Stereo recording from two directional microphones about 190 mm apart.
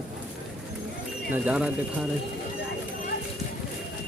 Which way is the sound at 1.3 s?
5° right (ahead or behind).